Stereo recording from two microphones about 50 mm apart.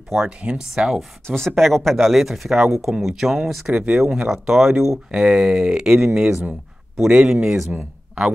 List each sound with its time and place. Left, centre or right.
0.4 s speech: right
0.7 s speech: centre
1.2 s speech: centre
7.1 s speech: centre